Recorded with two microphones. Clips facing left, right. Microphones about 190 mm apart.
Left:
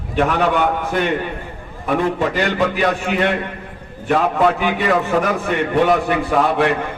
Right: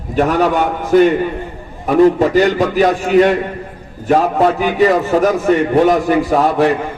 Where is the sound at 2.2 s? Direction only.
40° right (ahead or behind).